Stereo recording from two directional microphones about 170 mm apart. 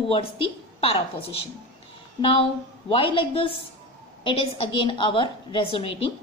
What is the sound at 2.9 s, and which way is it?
A woman's voice, 30° left (ahead or behind).